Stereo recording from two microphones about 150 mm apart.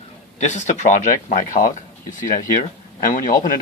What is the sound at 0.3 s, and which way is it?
Speech, 50° left (ahead or behind).